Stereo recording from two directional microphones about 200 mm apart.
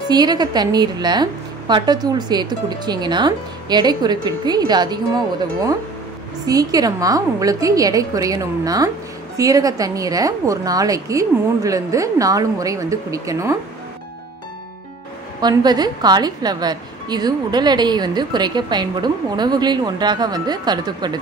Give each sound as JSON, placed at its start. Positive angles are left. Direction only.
{"t": 0.1, "sound": "a woman's voice", "side_deg": -20}
{"t": 15.4, "sound": "a woman's voice", "side_deg": -20}